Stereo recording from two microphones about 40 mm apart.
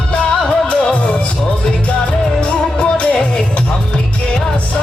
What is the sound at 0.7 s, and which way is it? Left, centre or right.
Music, left.